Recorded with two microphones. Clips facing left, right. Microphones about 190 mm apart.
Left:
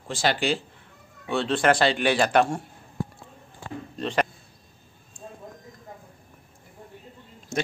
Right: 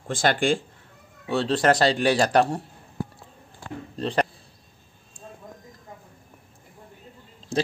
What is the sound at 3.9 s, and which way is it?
Speech, 35° right (ahead or behind).